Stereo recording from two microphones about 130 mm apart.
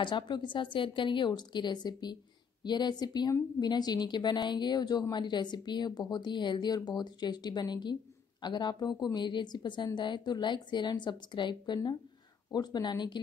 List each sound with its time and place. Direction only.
0.0 s a woman's voice: 35° left (ahead or behind)